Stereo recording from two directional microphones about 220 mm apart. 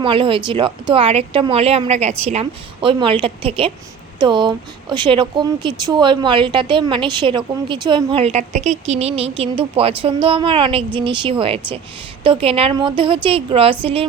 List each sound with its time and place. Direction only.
0.0 s speech: 25° right (ahead or behind)